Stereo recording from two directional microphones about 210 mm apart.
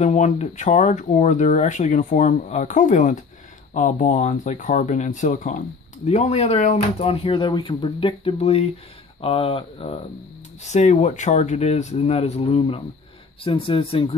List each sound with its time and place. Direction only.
0.0 s speech: 35° left (ahead or behind)